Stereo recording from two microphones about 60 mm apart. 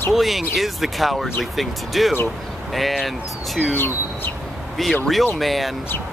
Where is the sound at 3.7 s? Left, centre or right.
Left.